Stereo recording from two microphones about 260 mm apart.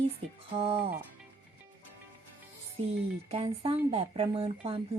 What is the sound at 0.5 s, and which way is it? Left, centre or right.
Speech, right.